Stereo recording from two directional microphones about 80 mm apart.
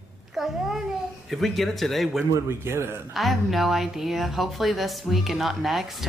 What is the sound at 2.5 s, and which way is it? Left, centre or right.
Speech, right.